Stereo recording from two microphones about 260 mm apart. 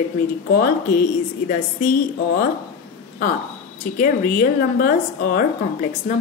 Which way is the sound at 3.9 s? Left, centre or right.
Left.